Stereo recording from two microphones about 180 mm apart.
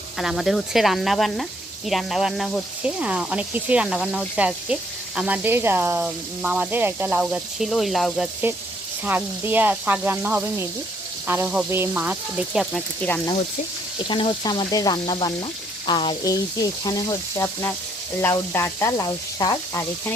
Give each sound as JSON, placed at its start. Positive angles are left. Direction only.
{"t": 0.2, "sound": "speech", "side_deg": 0}
{"t": 9.0, "sound": "speech", "side_deg": -10}
{"t": 14.1, "sound": "speech", "side_deg": 25}
{"t": 18.2, "sound": "sizzle", "side_deg": 10}